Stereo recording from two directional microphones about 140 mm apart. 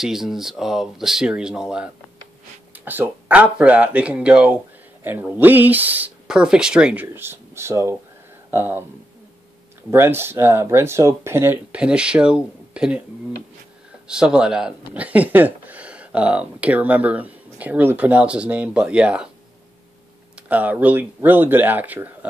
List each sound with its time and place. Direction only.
0.0 s speech: 5° right (ahead or behind)
9.8 s speech: 15° right (ahead or behind)
14.0 s speech: 5° right (ahead or behind)
20.3 s speech: 10° right (ahead or behind)